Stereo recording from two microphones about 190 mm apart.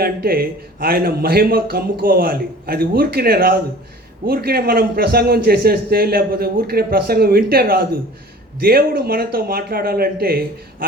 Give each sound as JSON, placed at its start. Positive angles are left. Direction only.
{"t": 0.0, "sound": "a man's voice", "side_deg": -55}